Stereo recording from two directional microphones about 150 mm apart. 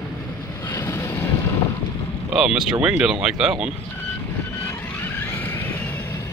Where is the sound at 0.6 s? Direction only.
20° left (ahead or behind).